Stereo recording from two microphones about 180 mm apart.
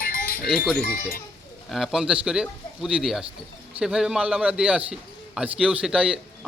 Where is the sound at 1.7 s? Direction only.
Centre (ahead or behind).